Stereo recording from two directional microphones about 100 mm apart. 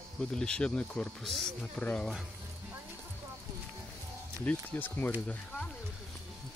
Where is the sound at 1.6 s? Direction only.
15° left (ahead or behind).